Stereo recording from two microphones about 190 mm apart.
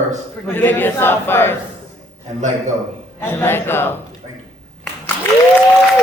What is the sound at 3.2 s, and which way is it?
Speech, 10° left (ahead or behind).